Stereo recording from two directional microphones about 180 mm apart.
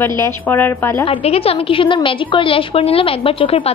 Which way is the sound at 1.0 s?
35° left (ahead or behind).